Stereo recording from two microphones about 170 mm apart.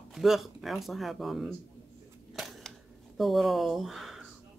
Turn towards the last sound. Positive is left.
turn(degrees=0)  # may be behind; listen again after turning